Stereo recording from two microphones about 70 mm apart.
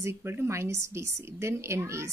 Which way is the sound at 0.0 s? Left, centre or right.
Right.